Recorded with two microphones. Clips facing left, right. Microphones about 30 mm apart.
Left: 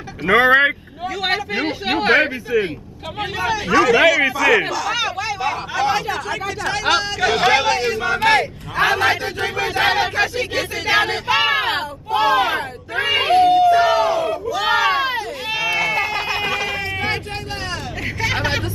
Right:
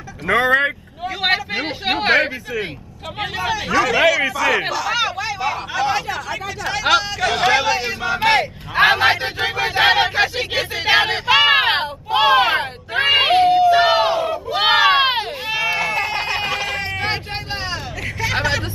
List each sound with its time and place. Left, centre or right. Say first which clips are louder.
0.3 s speech: left 3 dB; centre
1.0 s speech: right 2 dB; centre
8.7 s a man's voice: right 3 dB; right
13.8 s crowd: even; right
14.5 s a sound: right 4 dB; right
15.4 s run: left 2 dB; centre
16.3 s a sound: even; centre
16.6 s sheep: even; right
18.0 s hubbub: even; centre